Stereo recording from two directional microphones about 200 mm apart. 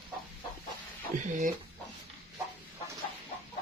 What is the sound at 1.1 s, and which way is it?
Speech, 40° right (ahead or behind).